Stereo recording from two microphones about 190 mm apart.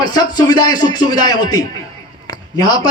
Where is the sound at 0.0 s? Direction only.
20° left (ahead or behind).